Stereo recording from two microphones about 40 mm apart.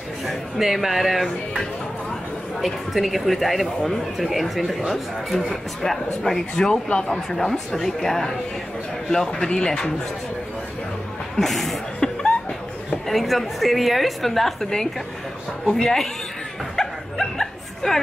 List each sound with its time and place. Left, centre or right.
0.3 s speech: centre
2.6 s speech: centre
6.7 s speech: centre
11.3 s speech: centre
12.0 s chuckle: centre
13.0 s speech: centre
15.7 s speech: centre
16.7 s bow-wow: centre